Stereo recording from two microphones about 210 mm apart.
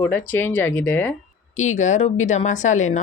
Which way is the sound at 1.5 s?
35° left (ahead or behind).